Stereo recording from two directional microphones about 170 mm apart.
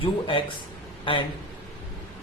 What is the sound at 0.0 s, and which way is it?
A man's voice, 30° left (ahead or behind).